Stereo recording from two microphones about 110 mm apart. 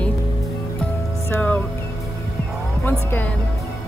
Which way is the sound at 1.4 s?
15° left (ahead or behind).